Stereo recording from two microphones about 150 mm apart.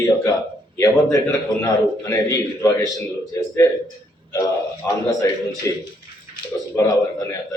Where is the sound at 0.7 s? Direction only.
20° left (ahead or behind).